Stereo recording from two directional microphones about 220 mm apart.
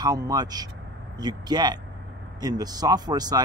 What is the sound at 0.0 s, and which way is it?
Speech, 15° right (ahead or behind).